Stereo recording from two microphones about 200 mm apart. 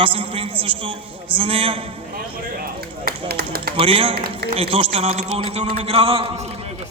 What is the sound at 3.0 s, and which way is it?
Speech, 50° right (ahead or behind).